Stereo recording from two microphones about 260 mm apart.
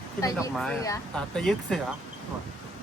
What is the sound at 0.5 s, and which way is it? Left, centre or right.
Speech, centre.